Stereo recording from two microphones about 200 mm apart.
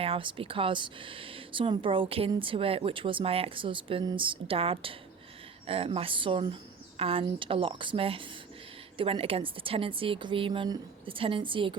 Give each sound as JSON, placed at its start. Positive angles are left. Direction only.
{"t": 0.0, "sound": "speech", "side_deg": -25}